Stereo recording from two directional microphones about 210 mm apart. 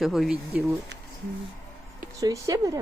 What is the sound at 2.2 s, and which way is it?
Speech, 15° right (ahead or behind).